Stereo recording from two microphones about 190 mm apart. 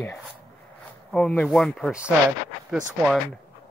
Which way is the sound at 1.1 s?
5° left (ahead or behind).